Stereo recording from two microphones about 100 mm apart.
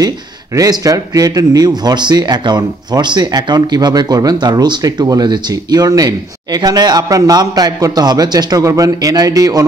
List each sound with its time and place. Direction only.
0.6 s a man's voice: 35° right (ahead or behind)